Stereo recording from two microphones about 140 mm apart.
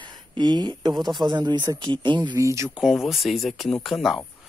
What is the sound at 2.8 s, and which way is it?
Speech, centre (ahead or behind).